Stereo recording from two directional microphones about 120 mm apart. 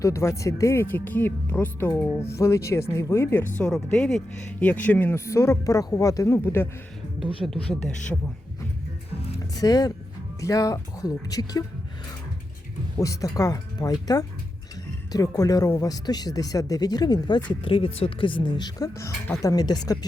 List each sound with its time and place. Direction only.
0.0 s speech: 25° left (ahead or behind)
7.4 s speech: 5° left (ahead or behind)
9.4 s speech: 30° left (ahead or behind)
13.0 s speech: 30° left (ahead or behind)
17.5 s speech: 50° left (ahead or behind)